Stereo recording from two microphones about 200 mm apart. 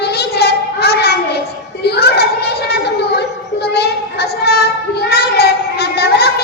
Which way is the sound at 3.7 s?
55° left (ahead or behind).